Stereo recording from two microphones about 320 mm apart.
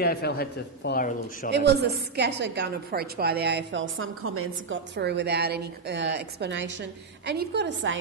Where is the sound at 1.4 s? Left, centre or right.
Right.